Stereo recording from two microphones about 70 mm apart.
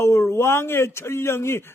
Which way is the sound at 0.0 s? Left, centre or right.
Left.